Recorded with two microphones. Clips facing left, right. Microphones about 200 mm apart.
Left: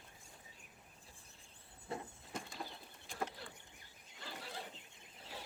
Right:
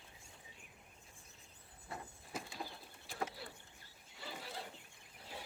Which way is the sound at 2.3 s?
5° right (ahead or behind).